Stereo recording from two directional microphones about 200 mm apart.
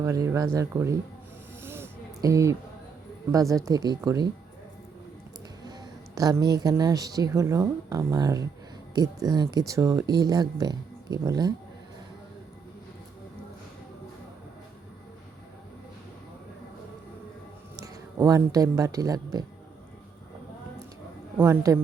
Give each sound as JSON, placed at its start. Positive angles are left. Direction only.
{"t": 0.0, "sound": "a woman's voice", "side_deg": -15}
{"t": 1.6, "sound": "a sound", "side_deg": -10}
{"t": 3.5, "sound": "a woman's voice", "side_deg": -15}
{"t": 6.1, "sound": "a woman's voice", "side_deg": -15}
{"t": 17.7, "sound": "speech", "side_deg": -15}
{"t": 21.3, "sound": "a woman's voice", "side_deg": -10}